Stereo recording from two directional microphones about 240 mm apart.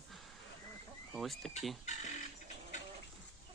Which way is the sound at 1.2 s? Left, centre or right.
Centre.